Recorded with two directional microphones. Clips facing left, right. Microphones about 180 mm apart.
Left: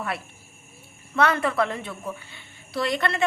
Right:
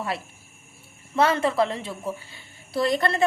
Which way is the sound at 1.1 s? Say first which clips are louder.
Right 1 dB; 25° right (ahead or behind).